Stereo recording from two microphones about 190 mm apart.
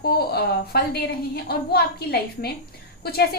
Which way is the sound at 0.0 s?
55° left (ahead or behind).